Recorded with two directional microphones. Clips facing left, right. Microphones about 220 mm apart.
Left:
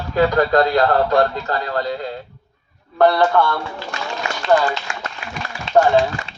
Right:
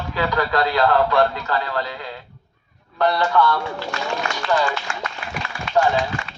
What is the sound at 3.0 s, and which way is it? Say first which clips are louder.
Speech: left 4 dB; 50° left (ahead or behind).